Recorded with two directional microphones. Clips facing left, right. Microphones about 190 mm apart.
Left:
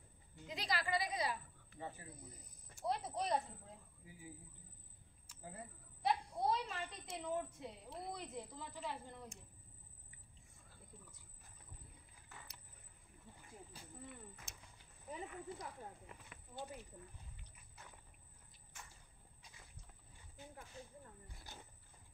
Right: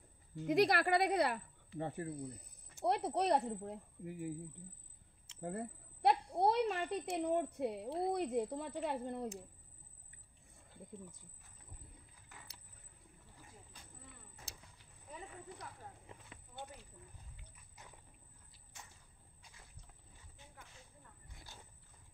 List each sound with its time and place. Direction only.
0.5 s a child's voice: 60° right (ahead or behind)
5.4 s a child's voice: 65° right (ahead or behind)
14.3 s a sound: 35° right (ahead or behind)